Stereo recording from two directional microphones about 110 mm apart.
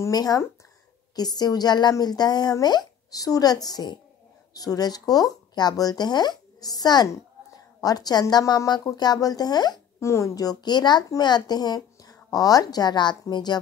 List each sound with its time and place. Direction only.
0.0 s speech: 35° left (ahead or behind)
9.9 s speech: 25° left (ahead or behind)